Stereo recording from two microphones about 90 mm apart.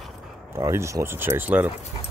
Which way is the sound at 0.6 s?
35° right (ahead or behind).